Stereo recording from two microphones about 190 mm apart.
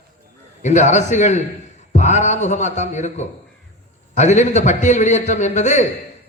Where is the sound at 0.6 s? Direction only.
40° left (ahead or behind).